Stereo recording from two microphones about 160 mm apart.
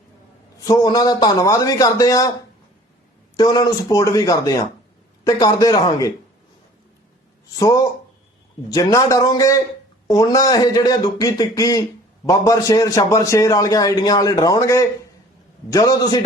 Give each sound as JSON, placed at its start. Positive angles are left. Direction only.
{"t": 0.7, "sound": "speech", "side_deg": 25}
{"t": 3.3, "sound": "speech", "side_deg": 25}
{"t": 7.6, "sound": "speech", "side_deg": 20}